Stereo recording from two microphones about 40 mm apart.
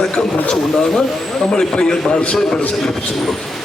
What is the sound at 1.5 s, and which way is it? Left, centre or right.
A man's voice, centre.